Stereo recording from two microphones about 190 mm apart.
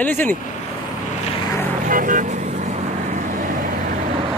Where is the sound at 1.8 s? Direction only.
45° right (ahead or behind).